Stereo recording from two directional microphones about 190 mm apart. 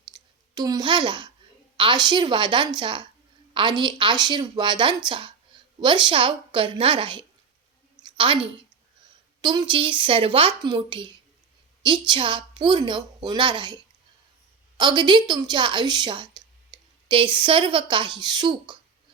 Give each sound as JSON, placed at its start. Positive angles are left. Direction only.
{"t": 0.5, "sound": "a woman's voice", "side_deg": -20}
{"t": 7.9, "sound": "a sound", "side_deg": -25}
{"t": 9.4, "sound": "a woman's voice", "side_deg": -25}
{"t": 14.8, "sound": "a woman's voice", "side_deg": -25}